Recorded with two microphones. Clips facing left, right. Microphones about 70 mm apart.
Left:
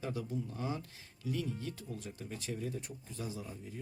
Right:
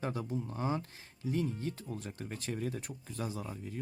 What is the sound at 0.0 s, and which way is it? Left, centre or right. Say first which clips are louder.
Speech: right 2 dB; right.